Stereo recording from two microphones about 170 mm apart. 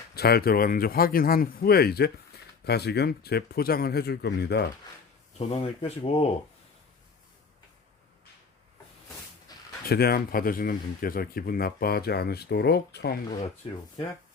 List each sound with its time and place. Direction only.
0.1 s speech: 65° left (ahead or behind)
5.5 s speech: 35° left (ahead or behind)
9.5 s a sound: 20° left (ahead or behind)
9.8 s speech: 65° left (ahead or behind)
13.6 s speech: 30° left (ahead or behind)